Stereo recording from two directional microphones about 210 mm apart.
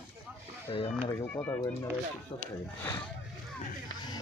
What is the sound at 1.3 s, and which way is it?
Speech, 10° left (ahead or behind).